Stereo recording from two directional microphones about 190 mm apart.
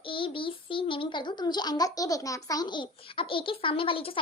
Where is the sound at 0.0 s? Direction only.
25° left (ahead or behind).